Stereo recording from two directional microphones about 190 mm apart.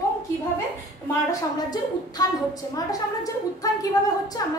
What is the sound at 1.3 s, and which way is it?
A woman's voice, 20° left (ahead or behind).